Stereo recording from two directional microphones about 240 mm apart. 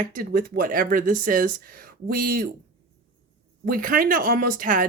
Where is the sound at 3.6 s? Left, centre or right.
Right.